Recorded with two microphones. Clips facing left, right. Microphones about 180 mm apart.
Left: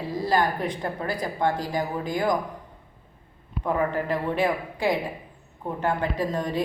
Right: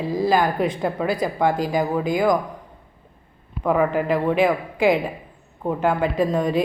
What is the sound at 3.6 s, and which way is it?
A woman's voice, 90° right.